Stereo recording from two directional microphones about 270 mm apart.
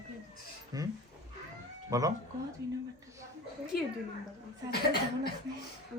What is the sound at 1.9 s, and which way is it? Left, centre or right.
Speech, centre.